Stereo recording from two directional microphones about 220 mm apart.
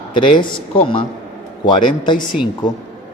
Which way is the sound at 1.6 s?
20° left (ahead or behind).